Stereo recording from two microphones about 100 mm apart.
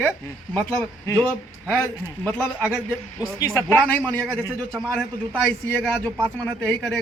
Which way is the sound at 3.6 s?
15° left (ahead or behind).